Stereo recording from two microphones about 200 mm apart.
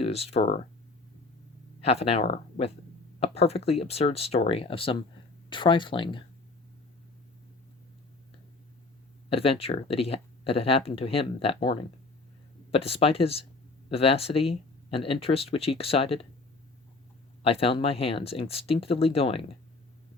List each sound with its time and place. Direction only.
0.0 s speech: 30° left (ahead or behind)
1.8 s speech: 30° left (ahead or behind)
9.3 s speech: 30° left (ahead or behind)
17.4 s speech: 30° left (ahead or behind)